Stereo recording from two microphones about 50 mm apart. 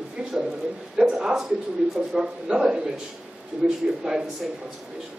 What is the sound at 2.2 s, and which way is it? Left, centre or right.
Speech, centre.